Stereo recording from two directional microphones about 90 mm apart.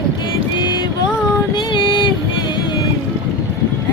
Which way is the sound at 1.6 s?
65° left (ahead or behind).